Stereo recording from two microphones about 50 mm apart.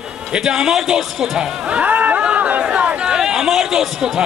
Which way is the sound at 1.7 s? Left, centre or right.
Right.